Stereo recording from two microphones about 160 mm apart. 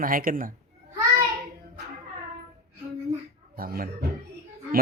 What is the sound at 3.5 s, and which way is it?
Speech, 65° right (ahead or behind).